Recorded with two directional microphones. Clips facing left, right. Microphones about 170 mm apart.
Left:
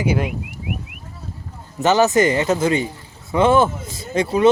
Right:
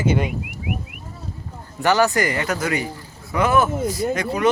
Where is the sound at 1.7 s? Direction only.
20° left (ahead or behind).